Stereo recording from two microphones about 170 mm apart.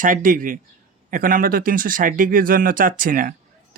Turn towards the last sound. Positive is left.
turn(degrees=-55)  # may be behind; listen again after turning